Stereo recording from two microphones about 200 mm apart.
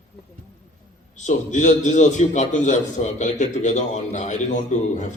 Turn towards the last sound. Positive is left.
turn(degrees=35)  # may be behind; listen again after turning